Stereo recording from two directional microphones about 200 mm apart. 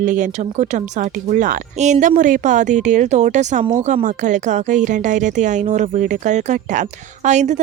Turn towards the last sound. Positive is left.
turn(degrees=-35)  # may be behind; listen again after turning